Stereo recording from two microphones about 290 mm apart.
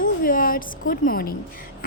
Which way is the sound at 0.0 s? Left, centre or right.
Left.